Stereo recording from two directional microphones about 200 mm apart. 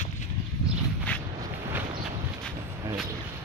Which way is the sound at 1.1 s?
5° left (ahead or behind).